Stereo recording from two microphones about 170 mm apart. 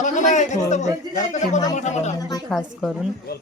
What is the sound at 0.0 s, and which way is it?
Speech, 45° left (ahead or behind).